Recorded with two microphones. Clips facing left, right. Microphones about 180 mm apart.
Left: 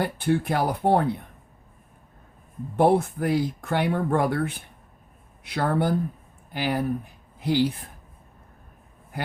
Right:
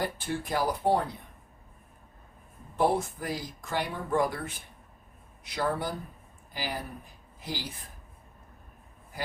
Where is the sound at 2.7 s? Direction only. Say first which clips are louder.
Left 7 dB; 60° left (ahead or behind).